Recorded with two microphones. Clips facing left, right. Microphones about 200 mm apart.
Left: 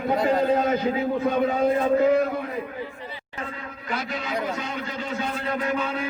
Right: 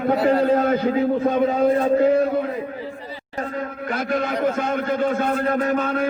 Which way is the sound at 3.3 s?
45° right (ahead or behind).